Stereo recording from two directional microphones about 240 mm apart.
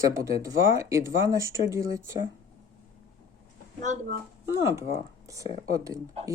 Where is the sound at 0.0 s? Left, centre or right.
Centre.